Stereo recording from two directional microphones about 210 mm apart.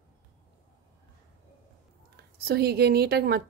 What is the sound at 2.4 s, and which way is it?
A woman's voice, 50° right (ahead or behind).